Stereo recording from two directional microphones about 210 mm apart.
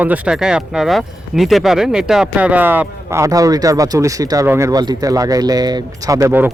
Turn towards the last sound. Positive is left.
turn(degrees=-10)  # may be behind; listen again after turning